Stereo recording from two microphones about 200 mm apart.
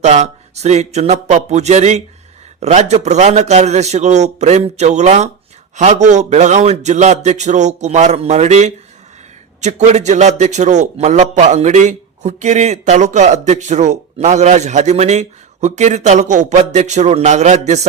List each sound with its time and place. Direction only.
0.0 s a man's voice: 35° right (ahead or behind)